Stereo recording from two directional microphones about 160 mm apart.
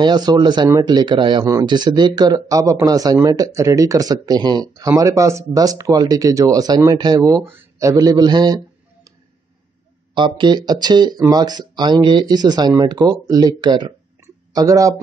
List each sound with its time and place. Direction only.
0.0 s a man's voice: 25° right (ahead or behind)
10.1 s speech: 30° right (ahead or behind)
14.2 s a sound: 20° right (ahead or behind)